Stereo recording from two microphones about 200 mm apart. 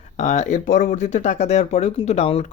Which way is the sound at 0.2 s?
35° left (ahead or behind).